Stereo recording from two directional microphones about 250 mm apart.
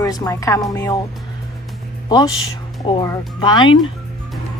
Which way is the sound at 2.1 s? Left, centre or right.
Centre.